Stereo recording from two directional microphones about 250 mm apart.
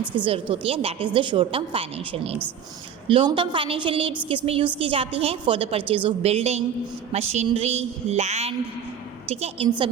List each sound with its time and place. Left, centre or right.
0.3 s a woman's voice: right